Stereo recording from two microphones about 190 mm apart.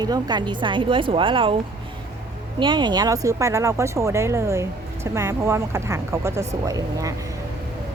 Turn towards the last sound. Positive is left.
turn(degrees=-15)  # may be behind; listen again after turning